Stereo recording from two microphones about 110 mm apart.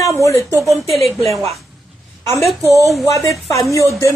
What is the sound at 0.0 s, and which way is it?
Speech, 30° left (ahead or behind).